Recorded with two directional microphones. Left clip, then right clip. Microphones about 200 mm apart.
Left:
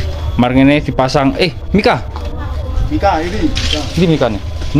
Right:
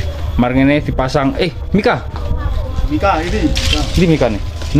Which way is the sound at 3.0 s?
40° right (ahead or behind).